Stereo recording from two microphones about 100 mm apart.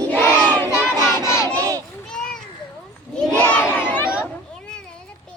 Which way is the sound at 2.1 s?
10° left (ahead or behind).